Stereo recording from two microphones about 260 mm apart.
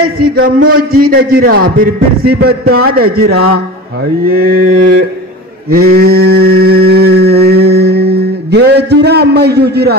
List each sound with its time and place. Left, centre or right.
0.0 s a man's voice: right
5.7 s mantra: right